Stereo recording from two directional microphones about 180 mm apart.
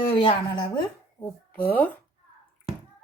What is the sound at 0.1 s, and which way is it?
Speech, 30° left (ahead or behind).